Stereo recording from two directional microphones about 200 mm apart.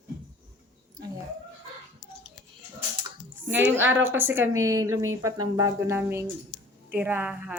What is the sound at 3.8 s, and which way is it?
A woman's voice, 10° right (ahead or behind).